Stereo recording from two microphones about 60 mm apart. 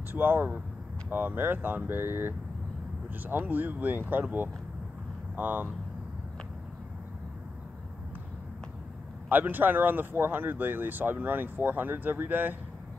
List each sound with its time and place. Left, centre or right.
0.1 s speech: right
9.3 s speech: right